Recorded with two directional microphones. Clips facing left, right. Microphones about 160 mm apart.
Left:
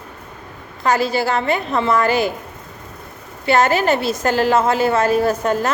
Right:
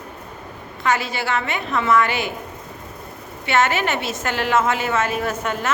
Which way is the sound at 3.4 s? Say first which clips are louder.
Left 4 dB; 35° left (ahead or behind).